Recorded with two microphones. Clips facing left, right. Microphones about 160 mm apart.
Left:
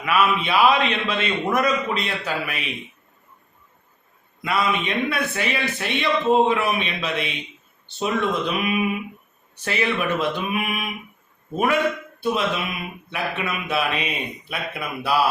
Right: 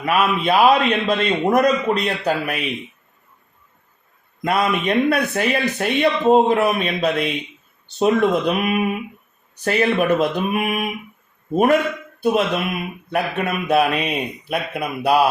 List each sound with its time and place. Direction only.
0.0 s a man's voice: 40° right (ahead or behind)
4.4 s a man's voice: 45° right (ahead or behind)